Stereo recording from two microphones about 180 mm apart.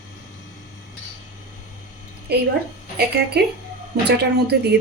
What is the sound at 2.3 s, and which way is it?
Speech, 65° right (ahead or behind).